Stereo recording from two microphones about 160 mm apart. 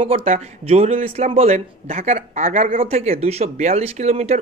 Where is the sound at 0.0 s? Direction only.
35° right (ahead or behind); by 2.8 s 55° right (ahead or behind).